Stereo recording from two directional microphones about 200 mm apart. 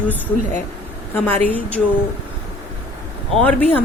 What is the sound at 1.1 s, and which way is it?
Speech, 10° left (ahead or behind).